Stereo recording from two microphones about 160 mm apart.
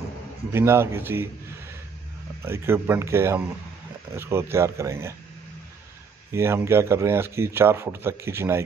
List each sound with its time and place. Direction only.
0.5 s a man's voice: 15° right (ahead or behind)
2.4 s a man's voice: 15° right (ahead or behind)
6.3 s a man's voice: 15° right (ahead or behind)